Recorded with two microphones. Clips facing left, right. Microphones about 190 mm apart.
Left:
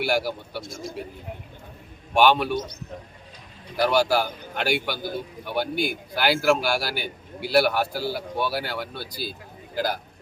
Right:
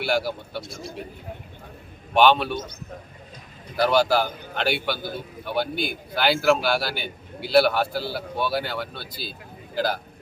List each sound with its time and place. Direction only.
0.0 s a man's voice: 10° left (ahead or behind)
0.6 s a man's voice: 45° left (ahead or behind)
2.1 s a man's voice: 10° left (ahead or behind)
3.8 s a man's voice: 10° left (ahead or behind)